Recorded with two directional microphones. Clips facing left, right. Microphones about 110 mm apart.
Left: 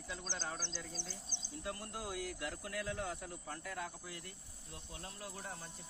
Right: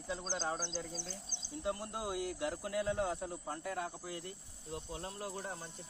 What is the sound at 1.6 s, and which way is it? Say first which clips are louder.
Speech: right 6 dB; 25° right (ahead or behind).